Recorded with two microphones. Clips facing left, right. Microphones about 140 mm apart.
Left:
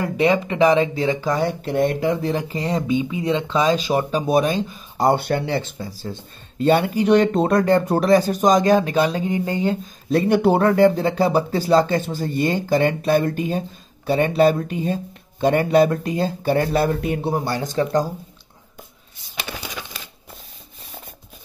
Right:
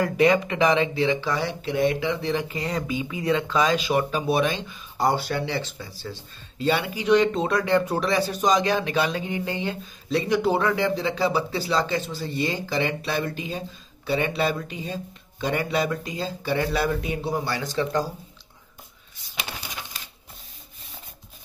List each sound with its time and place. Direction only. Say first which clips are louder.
0.0 s speech: left 1 dB; 30° left (ahead or behind); by 17.3 s 55° left (ahead or behind)
17.8 s speech: left 4 dB; 35° left (ahead or behind)